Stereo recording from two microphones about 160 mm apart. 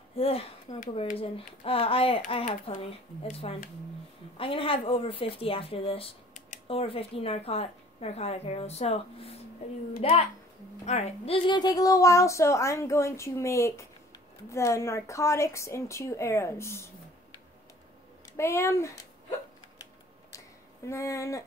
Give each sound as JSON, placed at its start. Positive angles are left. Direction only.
{"t": 0.1, "sound": "a woman's voice", "side_deg": 35}
{"t": 18.3, "sound": "speech", "side_deg": 15}
{"t": 19.8, "sound": "a sound", "side_deg": 20}